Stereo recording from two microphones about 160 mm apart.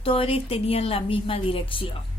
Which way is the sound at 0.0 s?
35° left (ahead or behind).